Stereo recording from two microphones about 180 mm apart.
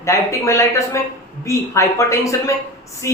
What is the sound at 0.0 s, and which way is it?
A woman's voice, 15° left (ahead or behind).